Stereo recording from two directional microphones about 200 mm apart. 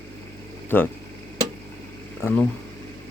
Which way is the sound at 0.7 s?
10° left (ahead or behind).